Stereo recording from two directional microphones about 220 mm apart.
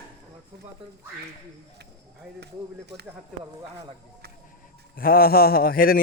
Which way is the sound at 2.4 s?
50° right (ahead or behind).